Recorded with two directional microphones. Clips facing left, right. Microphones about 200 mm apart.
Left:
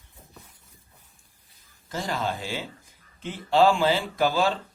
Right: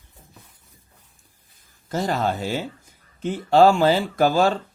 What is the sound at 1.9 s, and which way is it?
Speech, 45° right (ahead or behind).